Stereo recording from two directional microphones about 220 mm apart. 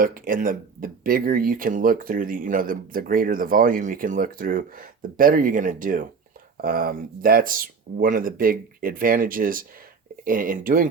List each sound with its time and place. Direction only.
0.0 s speech: 40° right (ahead or behind)